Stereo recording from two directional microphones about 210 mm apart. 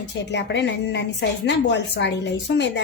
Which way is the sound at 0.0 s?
55° left (ahead or behind).